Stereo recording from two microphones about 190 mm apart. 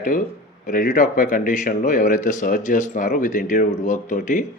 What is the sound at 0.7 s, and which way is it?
A man's voice, 45° left (ahead or behind).